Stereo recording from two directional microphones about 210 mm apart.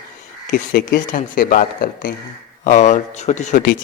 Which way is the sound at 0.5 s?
45° left (ahead or behind).